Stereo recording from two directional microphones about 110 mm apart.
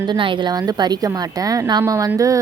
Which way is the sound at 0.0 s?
45° right (ahead or behind).